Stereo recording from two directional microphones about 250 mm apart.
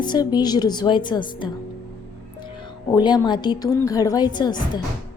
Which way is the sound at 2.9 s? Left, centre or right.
Centre.